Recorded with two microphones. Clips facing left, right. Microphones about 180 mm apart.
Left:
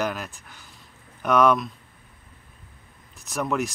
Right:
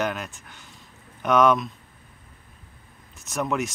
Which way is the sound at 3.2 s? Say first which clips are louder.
Even; centre (ahead or behind).